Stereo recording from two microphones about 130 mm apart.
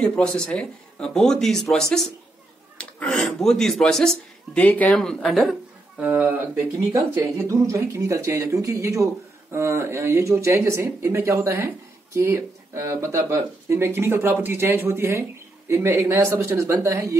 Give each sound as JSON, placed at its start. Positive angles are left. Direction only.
{"t": 0.0, "sound": "speech", "side_deg": 5}
{"t": 5.9, "sound": "speech", "side_deg": -10}